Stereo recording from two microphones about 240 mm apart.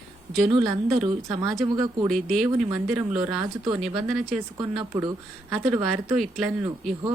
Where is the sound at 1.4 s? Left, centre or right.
Centre.